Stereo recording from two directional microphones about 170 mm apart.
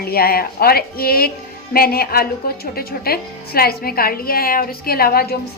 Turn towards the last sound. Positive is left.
turn(degrees=65)  # may be behind; listen again after turning